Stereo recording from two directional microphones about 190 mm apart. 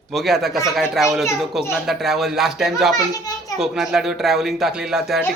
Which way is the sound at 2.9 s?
20° left (ahead or behind).